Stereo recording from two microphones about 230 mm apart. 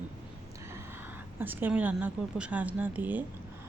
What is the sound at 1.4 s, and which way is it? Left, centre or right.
Speech, centre.